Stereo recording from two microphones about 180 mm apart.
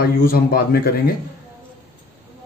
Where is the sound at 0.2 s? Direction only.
55° left (ahead or behind).